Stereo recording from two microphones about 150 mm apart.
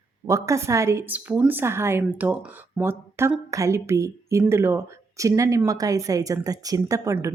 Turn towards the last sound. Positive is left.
turn(degrees=-20)  # may be behind; listen again after turning